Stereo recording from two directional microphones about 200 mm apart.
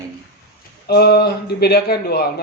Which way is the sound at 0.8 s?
55° left (ahead or behind).